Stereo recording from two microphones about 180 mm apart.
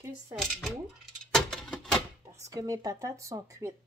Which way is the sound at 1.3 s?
5° left (ahead or behind).